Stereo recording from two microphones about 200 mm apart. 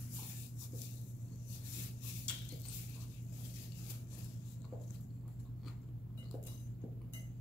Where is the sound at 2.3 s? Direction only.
5° left (ahead or behind).